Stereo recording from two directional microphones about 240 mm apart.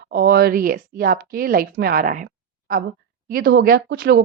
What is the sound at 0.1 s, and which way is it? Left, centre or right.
A woman's voice, right.